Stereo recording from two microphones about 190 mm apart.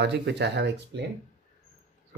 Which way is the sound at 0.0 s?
65° right (ahead or behind).